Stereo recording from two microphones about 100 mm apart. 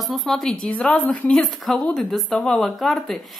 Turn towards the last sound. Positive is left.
turn(degrees=0)  # may be behind; listen again after turning